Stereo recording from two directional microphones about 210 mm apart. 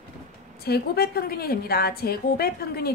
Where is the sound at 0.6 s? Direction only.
50° left (ahead or behind).